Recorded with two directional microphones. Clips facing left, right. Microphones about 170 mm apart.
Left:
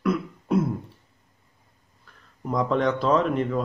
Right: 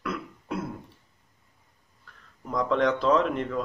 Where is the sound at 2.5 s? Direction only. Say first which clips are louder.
Left 1 dB; 5° left (ahead or behind).